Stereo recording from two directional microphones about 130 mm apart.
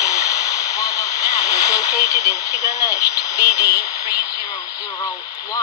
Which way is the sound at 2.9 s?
30° left (ahead or behind).